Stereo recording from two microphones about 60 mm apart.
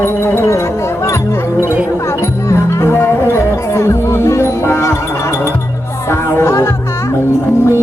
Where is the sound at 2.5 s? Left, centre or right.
Left.